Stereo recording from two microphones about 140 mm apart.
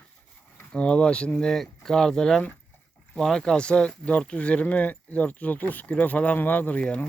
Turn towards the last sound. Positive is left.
turn(degrees=10)  # may be behind; listen again after turning